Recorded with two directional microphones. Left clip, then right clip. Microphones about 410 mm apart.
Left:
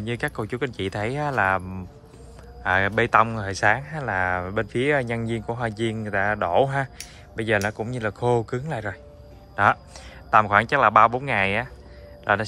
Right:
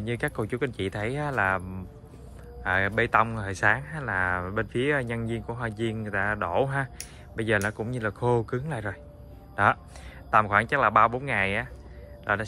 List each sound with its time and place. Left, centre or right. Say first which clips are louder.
0.0 s speech: left 2 dB; centre